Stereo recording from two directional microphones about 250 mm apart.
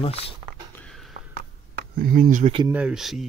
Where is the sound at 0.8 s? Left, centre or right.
Centre.